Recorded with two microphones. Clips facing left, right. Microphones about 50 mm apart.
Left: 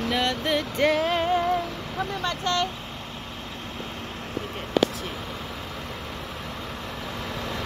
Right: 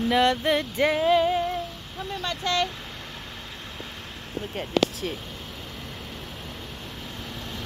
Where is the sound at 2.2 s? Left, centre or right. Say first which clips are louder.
Right 1 dB; left.